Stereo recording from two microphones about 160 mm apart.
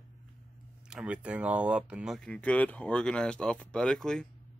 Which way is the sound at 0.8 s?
5° right (ahead or behind).